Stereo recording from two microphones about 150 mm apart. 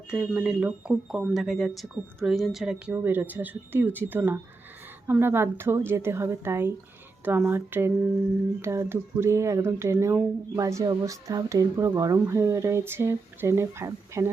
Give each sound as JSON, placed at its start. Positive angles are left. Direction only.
{"t": 0.1, "sound": "speech", "side_deg": -5}